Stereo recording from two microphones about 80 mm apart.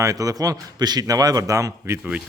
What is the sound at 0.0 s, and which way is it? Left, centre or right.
A man's voice, right.